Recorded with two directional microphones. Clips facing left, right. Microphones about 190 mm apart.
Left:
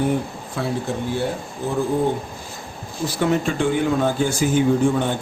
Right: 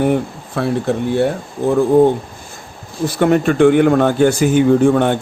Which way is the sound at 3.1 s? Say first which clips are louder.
Right 7 dB; 60° right (ahead or behind).